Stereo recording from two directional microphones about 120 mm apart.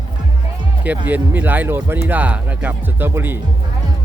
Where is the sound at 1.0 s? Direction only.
15° right (ahead or behind).